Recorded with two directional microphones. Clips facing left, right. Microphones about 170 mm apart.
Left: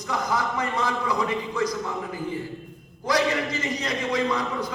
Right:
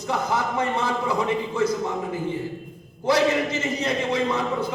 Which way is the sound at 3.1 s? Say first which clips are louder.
Right 3 dB; 25° right (ahead or behind).